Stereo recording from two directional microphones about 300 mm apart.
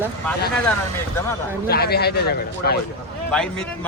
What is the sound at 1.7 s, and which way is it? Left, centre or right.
Speech, left.